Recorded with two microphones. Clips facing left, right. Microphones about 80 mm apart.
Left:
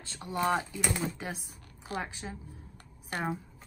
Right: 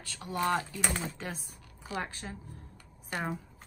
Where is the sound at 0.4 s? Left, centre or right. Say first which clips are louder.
Left 1 dB; centre.